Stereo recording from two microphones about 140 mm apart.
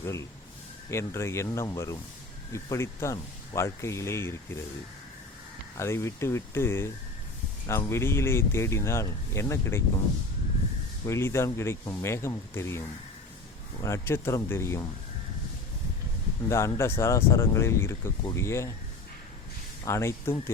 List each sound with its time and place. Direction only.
0.0 s speech: 20° left (ahead or behind)
5.7 s speech: 20° left (ahead or behind)
11.0 s speech: 20° left (ahead or behind)
13.8 s speech: 20° left (ahead or behind)
16.5 s speech: 20° left (ahead or behind)
19.8 s speech: 20° left (ahead or behind)